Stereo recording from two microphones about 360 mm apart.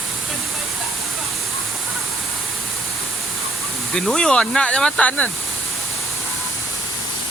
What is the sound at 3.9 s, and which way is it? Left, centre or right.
Speech, centre.